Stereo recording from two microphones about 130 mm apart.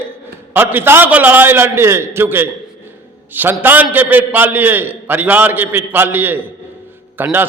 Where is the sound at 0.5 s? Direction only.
15° right (ahead or behind).